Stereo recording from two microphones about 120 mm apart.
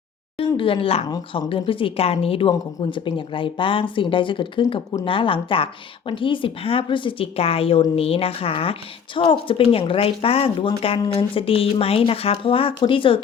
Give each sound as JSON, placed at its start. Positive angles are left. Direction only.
{"t": 0.3, "sound": "a woman's voice", "side_deg": 50}